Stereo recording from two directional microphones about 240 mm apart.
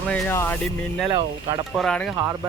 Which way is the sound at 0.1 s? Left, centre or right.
Centre.